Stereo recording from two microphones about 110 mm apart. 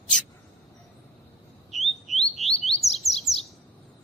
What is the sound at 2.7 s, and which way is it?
Bird, 70° left (ahead or behind).